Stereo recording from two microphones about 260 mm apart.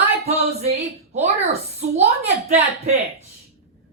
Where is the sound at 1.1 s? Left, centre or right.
Right.